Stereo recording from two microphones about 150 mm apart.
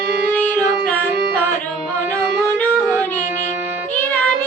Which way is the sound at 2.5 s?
10° left (ahead or behind).